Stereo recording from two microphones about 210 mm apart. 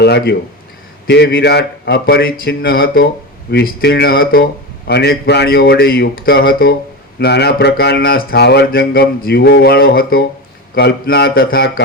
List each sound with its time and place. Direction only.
0.0 s speech: 50° left (ahead or behind)